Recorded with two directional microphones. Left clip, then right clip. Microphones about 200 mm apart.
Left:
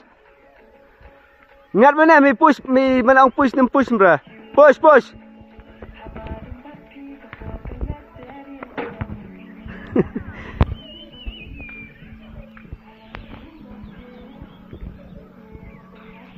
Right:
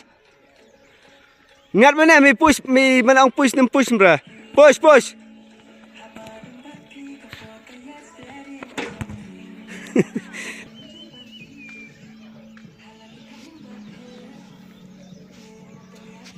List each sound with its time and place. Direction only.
1.7 s a man's voice: 35° right (ahead or behind)
8.3 s music: 5° right (ahead or behind)
9.8 s a sound: 45° right (ahead or behind)